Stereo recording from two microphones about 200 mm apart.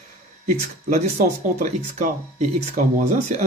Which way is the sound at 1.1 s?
40° right (ahead or behind).